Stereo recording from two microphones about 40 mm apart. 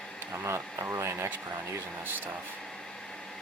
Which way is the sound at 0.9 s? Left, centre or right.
Right.